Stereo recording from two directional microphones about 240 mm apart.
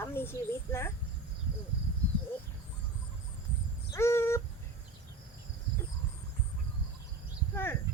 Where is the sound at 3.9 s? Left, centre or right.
Centre.